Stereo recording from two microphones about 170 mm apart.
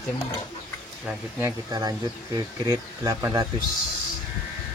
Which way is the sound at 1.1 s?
15° right (ahead or behind).